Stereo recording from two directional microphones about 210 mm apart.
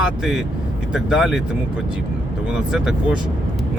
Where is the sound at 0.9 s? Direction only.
Centre (ahead or behind).